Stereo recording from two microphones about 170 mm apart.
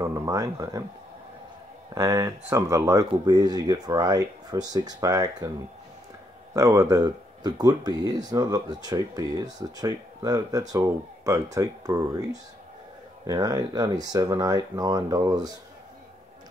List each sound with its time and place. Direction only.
0.0 s speech: 20° right (ahead or behind)
2.0 s speech: 20° right (ahead or behind)
6.5 s speech: 20° right (ahead or behind)